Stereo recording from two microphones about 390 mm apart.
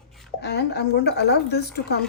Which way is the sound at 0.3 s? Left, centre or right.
Left.